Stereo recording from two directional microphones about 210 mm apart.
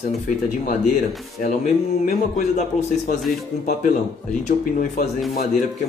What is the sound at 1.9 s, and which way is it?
A man's voice, 35° left (ahead or behind).